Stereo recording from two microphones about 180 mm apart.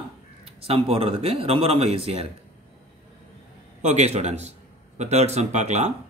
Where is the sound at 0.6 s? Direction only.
35° right (ahead or behind).